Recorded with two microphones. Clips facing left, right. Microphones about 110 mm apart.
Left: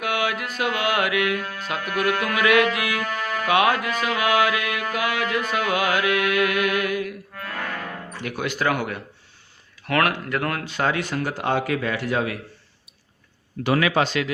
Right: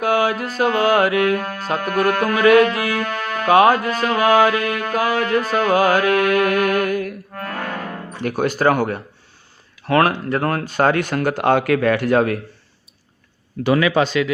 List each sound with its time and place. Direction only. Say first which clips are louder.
0.0 s music: right 7 dB; 35° right (ahead or behind)
9.8 s speech: right 6 dB; 30° right (ahead or behind); by 12.4 s 50° right (ahead or behind)